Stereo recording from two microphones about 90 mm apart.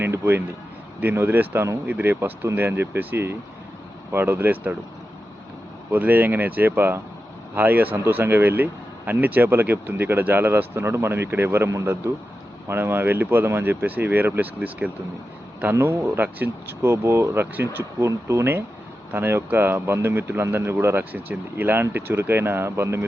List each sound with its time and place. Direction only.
0.0 s a sound: 25° right (ahead or behind)
1.0 s speech: 25° right (ahead or behind)
5.9 s speech: 20° right (ahead or behind)